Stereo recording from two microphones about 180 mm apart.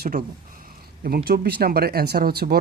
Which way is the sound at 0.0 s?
50° right (ahead or behind).